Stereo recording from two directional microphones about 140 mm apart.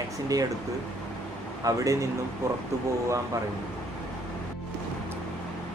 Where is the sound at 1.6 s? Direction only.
25° right (ahead or behind).